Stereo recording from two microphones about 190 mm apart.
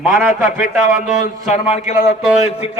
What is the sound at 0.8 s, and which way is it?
A man's voice, 40° left (ahead or behind).